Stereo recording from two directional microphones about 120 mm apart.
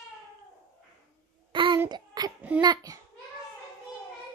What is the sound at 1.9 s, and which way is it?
Child singing, 35° right (ahead or behind).